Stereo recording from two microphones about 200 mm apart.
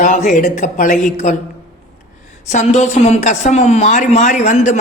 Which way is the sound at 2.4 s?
35° left (ahead or behind).